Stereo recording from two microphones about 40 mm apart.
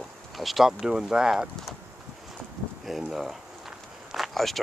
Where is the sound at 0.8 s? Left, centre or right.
Centre.